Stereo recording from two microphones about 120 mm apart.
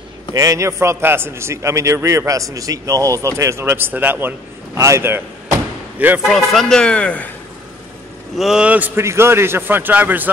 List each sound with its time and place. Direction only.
0.3 s a man's voice: 25° right (ahead or behind)
6.2 s speech: 5° left (ahead or behind)
8.4 s a man's voice: 5° right (ahead or behind)